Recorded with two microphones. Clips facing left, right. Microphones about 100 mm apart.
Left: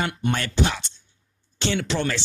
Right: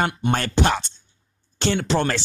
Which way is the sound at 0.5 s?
60° right (ahead or behind).